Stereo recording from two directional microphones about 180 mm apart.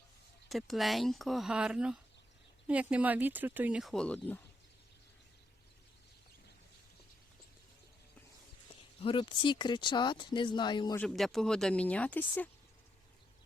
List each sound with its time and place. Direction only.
0.4 s speech: centre (ahead or behind)
9.0 s speech: 30° left (ahead or behind)
10.9 s speech: 5° left (ahead or behind)